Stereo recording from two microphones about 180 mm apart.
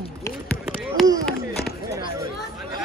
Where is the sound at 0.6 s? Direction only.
5° right (ahead or behind).